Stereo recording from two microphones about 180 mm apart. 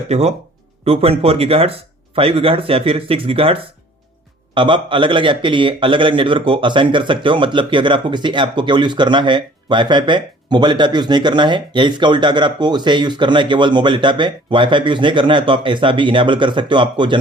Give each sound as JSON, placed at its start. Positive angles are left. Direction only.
{"t": 0.1, "sound": "a man's voice", "side_deg": -35}